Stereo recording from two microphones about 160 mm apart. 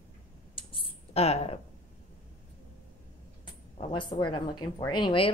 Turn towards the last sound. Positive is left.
turn(degrees=30)  # may be behind; listen again after turning